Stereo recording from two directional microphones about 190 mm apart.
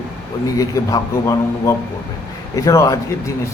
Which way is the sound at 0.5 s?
15° left (ahead or behind).